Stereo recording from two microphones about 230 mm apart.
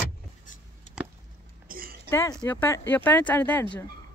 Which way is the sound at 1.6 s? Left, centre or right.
Right.